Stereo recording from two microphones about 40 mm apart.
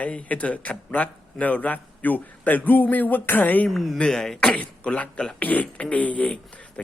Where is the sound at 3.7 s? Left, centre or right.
Centre.